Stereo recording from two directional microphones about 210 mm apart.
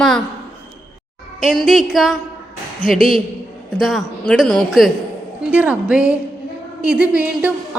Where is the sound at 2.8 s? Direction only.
40° left (ahead or behind).